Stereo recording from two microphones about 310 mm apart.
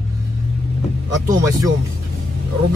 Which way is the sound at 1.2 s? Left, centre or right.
Centre.